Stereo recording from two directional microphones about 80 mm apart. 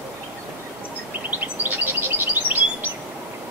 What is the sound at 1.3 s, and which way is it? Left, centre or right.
Bird, right.